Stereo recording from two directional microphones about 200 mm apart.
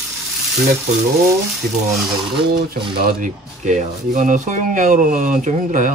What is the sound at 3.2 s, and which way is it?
Speech, 40° right (ahead or behind).